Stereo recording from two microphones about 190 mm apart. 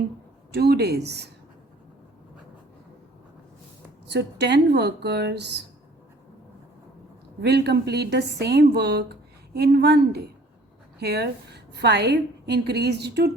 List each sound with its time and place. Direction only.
0.5 s a woman's voice: 60° right (ahead or behind)
4.0 s a woman's voice: 65° right (ahead or behind)
7.4 s a woman's voice: 60° right (ahead or behind)